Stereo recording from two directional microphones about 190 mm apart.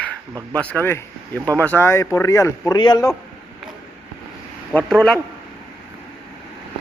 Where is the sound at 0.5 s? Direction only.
5° left (ahead or behind).